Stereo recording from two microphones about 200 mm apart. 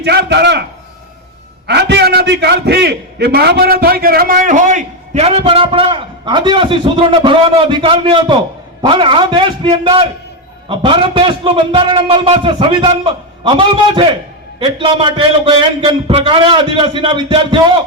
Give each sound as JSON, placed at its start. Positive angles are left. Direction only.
{"t": 0.0, "sound": "a man's voice", "side_deg": -55}
{"t": 1.6, "sound": "a man's voice", "side_deg": -55}